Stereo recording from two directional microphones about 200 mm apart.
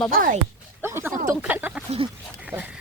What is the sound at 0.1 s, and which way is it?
Speech, 45° right (ahead or behind).